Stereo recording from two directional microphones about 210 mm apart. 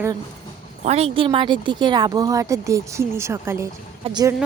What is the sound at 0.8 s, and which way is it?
Speech, 30° right (ahead or behind).